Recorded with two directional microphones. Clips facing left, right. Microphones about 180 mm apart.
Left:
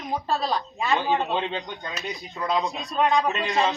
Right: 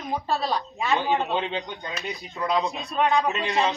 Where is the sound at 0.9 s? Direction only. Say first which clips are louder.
Even; 15° right (ahead or behind).